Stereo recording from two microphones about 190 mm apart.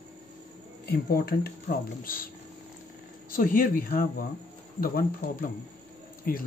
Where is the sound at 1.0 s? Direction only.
55° left (ahead or behind).